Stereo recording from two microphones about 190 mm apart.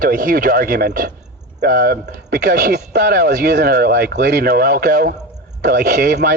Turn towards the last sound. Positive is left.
turn(degrees=-50)  # may be behind; listen again after turning